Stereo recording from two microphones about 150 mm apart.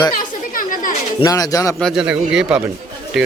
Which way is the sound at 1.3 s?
25° left (ahead or behind).